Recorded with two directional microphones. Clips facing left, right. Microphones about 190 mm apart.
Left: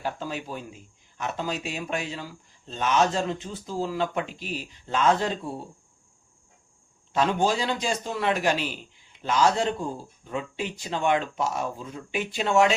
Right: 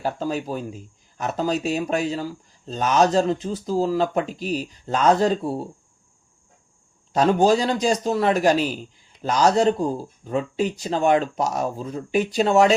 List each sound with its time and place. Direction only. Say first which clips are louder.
0.0 s a man's voice: right 6 dB; 40° right (ahead or behind)
7.1 s a man's voice: right 7 dB; 40° right (ahead or behind)